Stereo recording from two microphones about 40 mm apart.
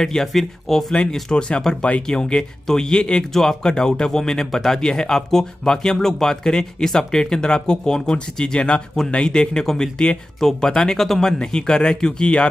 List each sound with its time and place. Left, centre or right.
0.0 s speech: centre
1.6 s speech: centre
3.3 s speech: centre
11.0 s speech: centre